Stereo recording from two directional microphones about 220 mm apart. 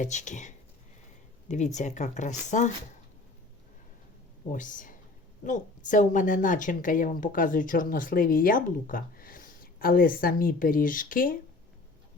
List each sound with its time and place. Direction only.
0.0 s a woman's voice: 35° left (ahead or behind)
4.5 s a woman's voice: 35° left (ahead or behind)